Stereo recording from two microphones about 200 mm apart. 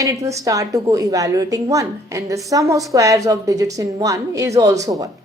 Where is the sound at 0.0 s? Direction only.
15° right (ahead or behind).